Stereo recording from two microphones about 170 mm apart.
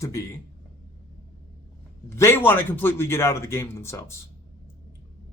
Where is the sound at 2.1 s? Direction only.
15° left (ahead or behind).